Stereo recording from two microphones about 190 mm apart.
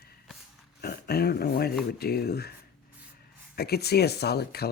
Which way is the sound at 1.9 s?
55° left (ahead or behind).